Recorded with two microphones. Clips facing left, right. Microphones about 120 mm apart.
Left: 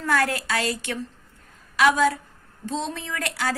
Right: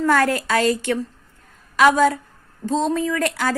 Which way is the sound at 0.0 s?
45° right (ahead or behind).